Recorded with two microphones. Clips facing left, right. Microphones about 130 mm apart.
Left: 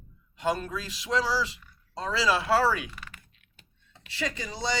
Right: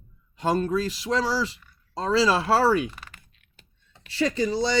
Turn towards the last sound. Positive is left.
turn(degrees=-35)  # may be behind; listen again after turning